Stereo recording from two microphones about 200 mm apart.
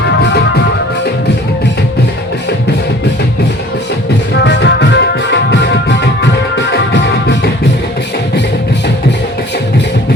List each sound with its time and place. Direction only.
4.4 s music: 60° left (ahead or behind)